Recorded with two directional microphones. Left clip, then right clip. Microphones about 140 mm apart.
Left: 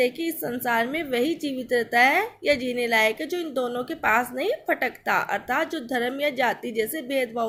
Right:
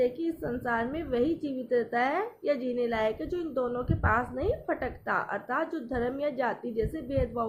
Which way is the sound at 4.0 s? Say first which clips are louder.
Left 6 dB; 40° left (ahead or behind).